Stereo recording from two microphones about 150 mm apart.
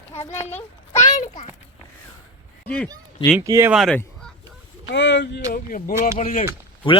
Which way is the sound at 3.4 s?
20° right (ahead or behind).